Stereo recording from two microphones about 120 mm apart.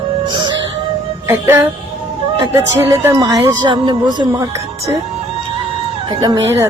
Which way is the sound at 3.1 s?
35° right (ahead or behind).